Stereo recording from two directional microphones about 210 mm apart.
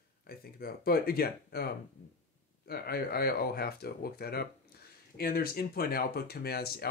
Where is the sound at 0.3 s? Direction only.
45° left (ahead or behind).